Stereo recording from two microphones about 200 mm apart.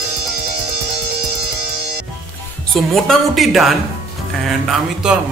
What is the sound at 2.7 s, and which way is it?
Music, centre (ahead or behind).